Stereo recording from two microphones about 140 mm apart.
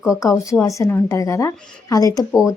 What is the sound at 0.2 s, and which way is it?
A woman's voice, 20° left (ahead or behind).